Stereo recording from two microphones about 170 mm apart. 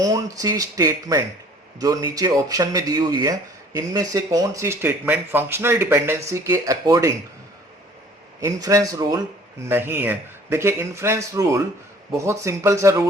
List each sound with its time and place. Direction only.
0.0 s speech: 20° right (ahead or behind)
8.4 s speech: 20° right (ahead or behind)